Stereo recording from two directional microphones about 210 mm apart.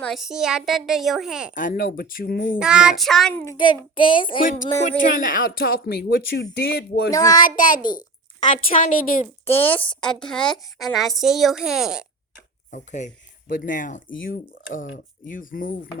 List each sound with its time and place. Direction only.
0.0 s a woman's voice: centre (ahead or behind)
1.5 s speech: 40° left (ahead or behind)
2.6 s child singing: 5° right (ahead or behind); by 4.4 s 25° left (ahead or behind)
4.4 s speech: 40° left (ahead or behind)
7.1 s child singing: 15° left (ahead or behind)
7.4 s speech: 40° left (ahead or behind)
9.5 s a woman's voice: 25° left (ahead or behind)
9.8 s a woman's voice: 5° left (ahead or behind)
12.7 s speech: 35° left (ahead or behind)